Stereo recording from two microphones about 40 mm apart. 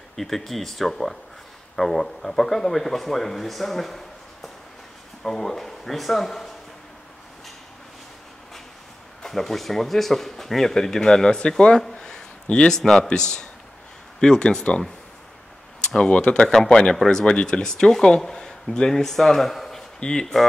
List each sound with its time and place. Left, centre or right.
0.1 s speech: centre
9.2 s speech: centre; by 14.8 s left
16.0 s speech: left
16.4 s speech: centre
20.0 s speech: centre